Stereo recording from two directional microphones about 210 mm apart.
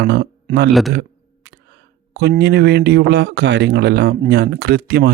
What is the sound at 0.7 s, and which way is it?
Speech, centre (ahead or behind).